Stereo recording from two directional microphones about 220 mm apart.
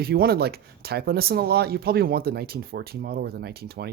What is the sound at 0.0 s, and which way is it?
Speech, 45° right (ahead or behind).